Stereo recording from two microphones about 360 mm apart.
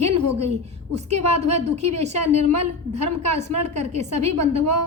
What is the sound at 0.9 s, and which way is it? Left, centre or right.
A woman's voice, centre.